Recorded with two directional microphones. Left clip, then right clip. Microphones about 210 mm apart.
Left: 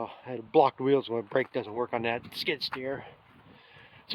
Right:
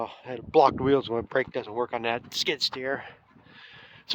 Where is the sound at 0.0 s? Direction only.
20° right (ahead or behind).